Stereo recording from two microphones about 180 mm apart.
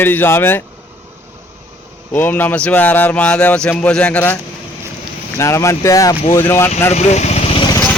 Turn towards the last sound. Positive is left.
turn(degrees=25)  # may be behind; listen again after turning